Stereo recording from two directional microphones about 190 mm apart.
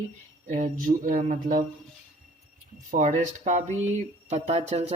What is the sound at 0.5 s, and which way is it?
Speech, 45° right (ahead or behind).